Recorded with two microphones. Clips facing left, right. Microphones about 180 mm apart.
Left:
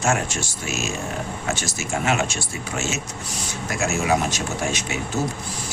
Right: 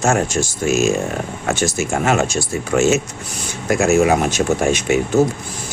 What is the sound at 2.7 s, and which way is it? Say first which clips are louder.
Speech: right 13 dB; 55° right (ahead or behind).